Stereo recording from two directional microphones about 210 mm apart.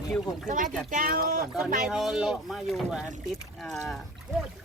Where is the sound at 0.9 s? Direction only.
40° right (ahead or behind).